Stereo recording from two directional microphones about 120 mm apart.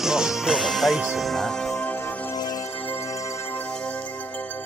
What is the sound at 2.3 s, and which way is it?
Music, 35° left (ahead or behind).